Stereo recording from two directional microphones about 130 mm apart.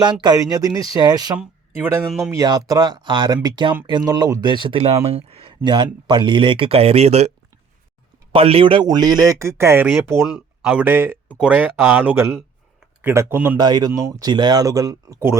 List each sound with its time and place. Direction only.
0.0 s speech: 35° right (ahead or behind)
1.8 s speech: 20° right (ahead or behind)
2.0 s speech: centre (ahead or behind)
2.3 s speech: 30° right (ahead or behind); by 7.3 s 55° right (ahead or behind)
8.3 s speech: 45° right (ahead or behind); by 9.8 s 20° right (ahead or behind)
10.3 s speech: 5° right (ahead or behind)
13.6 s speech: 30° right (ahead or behind)